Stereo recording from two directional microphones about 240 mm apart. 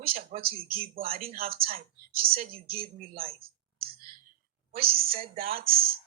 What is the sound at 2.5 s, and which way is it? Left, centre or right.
Speech, right.